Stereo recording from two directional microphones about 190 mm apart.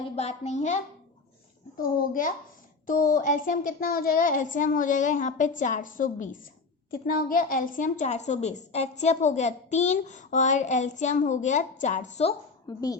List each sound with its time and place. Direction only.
0.2 s a child's voice: 35° left (ahead or behind)
1.8 s child singing: 45° left (ahead or behind)
6.9 s a child's voice: 50° left (ahead or behind)
12.6 s speech: 20° left (ahead or behind)